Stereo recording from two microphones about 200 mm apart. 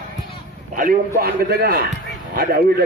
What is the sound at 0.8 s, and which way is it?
A man's voice, 50° right (ahead or behind).